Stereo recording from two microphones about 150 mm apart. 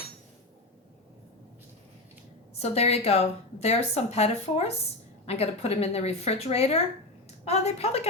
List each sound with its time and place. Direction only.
2.6 s a woman's voice: 45° left (ahead or behind)